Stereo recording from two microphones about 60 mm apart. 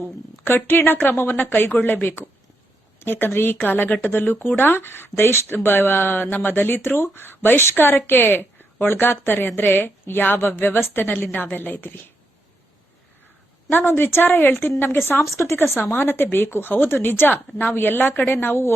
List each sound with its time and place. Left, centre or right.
0.4 s speech: left
13.7 s speech: left
15.3 s speech: left